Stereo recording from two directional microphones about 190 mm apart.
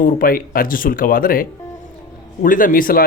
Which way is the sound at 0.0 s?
50° left (ahead or behind).